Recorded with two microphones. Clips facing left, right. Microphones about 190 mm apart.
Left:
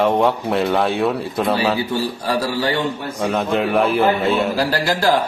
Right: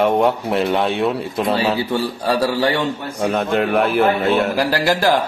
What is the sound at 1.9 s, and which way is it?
Speech, 25° right (ahead or behind).